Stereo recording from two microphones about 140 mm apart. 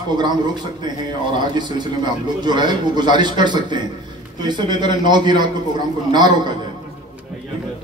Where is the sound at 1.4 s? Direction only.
30° right (ahead or behind).